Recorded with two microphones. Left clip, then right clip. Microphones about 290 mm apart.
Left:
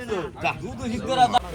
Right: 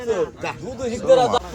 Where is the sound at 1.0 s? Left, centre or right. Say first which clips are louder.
Right 4 dB; right.